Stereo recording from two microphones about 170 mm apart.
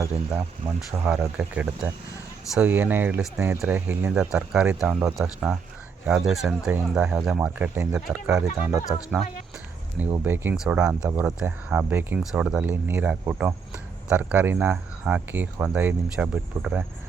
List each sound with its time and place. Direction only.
0.0 s speech: 15° right (ahead or behind)
0.6 s speech: 30° right (ahead or behind)
0.9 s speech: 10° right (ahead or behind)
11.1 s speech: 15° right (ahead or behind)